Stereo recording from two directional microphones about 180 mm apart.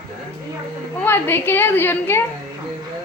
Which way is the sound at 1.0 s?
10° left (ahead or behind).